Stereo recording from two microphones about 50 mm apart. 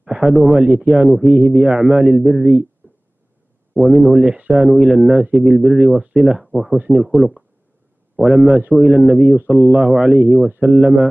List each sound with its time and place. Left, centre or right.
0.2 s speech: centre
1.2 s a man's voice: centre
2.8 s a sound: right
3.7 s a man's voice: centre
5.0 s a man's voice: centre